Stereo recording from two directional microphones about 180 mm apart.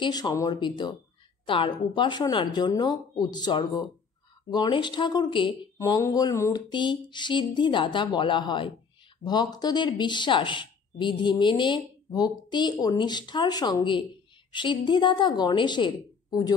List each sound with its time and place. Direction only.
0.0 s speech: 20° left (ahead or behind)